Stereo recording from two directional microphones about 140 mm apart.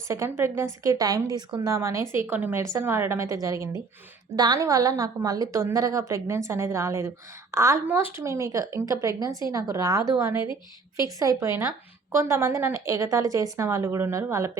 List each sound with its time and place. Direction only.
0.1 s speech: 20° right (ahead or behind)
10.4 s a woman's voice: 35° left (ahead or behind)
11.0 s speech: 25° right (ahead or behind)